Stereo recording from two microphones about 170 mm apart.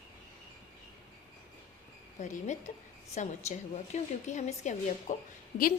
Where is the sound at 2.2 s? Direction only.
45° left (ahead or behind).